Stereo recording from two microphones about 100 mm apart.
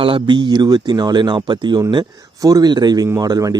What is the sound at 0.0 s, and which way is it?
Speech, 60° right (ahead or behind).